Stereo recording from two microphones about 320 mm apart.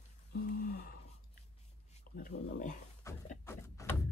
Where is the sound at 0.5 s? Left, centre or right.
Left.